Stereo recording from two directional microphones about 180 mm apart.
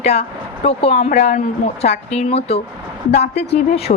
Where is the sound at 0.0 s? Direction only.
35° left (ahead or behind).